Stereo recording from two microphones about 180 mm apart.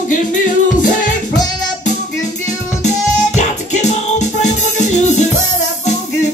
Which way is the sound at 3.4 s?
40° left (ahead or behind).